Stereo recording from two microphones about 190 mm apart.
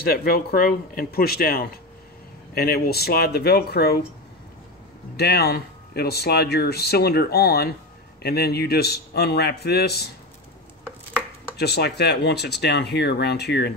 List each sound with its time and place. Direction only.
0.0 s speech: 50° left (ahead or behind)
5.1 s speech: 55° left (ahead or behind)
11.5 s speech: 60° left (ahead or behind)